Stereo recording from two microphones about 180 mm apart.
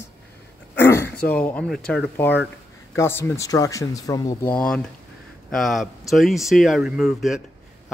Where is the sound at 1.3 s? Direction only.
5° left (ahead or behind).